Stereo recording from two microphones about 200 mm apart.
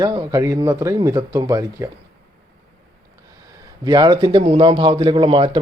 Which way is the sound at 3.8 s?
20° right (ahead or behind).